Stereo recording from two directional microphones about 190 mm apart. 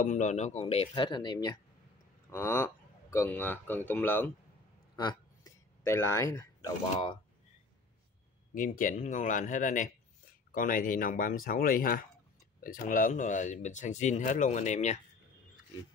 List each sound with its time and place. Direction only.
0.0 s speech: 40° left (ahead or behind); by 1.5 s 25° left (ahead or behind)
2.3 s speech: 10° left (ahead or behind)
4.9 s speech: 20° left (ahead or behind)
8.5 s speech: 45° left (ahead or behind)